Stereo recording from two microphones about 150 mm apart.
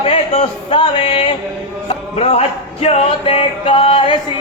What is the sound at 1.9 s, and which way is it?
Music, 40° left (ahead or behind).